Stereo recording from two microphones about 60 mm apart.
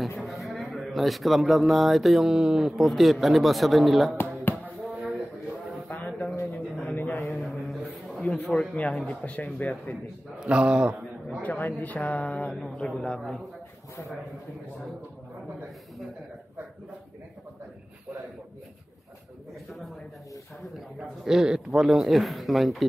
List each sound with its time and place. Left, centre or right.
0.2 s speech: centre
4.7 s a sound: centre
6.8 s a sound: left
7.3 s a sound: centre
8.7 s a man's voice: left
10.4 s speech: centre
11.4 s a man's voice: left
12.5 s speech: centre
21.2 s speech: centre